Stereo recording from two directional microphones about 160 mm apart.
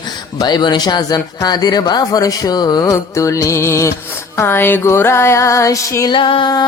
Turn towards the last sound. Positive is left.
turn(degrees=30)  # may be behind; listen again after turning